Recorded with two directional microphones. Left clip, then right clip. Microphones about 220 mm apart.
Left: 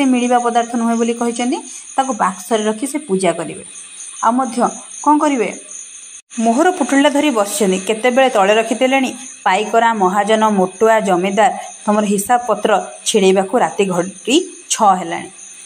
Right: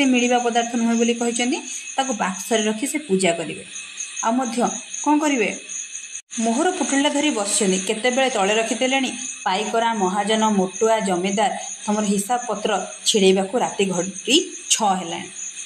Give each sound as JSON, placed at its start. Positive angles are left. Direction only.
{"t": 0.0, "sound": "speech", "side_deg": 15}
{"t": 6.3, "sound": "speech", "side_deg": 25}